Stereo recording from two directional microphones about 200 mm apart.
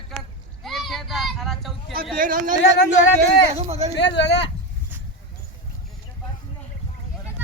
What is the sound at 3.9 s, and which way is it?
Speech, 60° left (ahead or behind).